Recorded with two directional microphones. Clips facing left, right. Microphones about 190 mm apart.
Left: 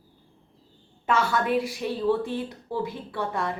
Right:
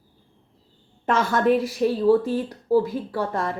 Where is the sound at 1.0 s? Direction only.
45° right (ahead or behind).